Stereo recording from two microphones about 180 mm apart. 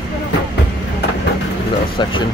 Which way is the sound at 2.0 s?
25° left (ahead or behind).